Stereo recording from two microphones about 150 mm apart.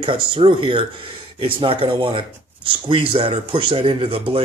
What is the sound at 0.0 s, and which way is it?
Speech, 35° right (ahead or behind).